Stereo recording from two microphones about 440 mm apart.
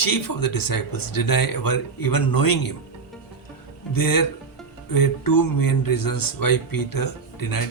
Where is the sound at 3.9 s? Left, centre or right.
Left.